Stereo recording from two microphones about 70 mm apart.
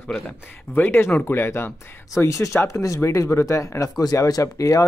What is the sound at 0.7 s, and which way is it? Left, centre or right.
Speech, left.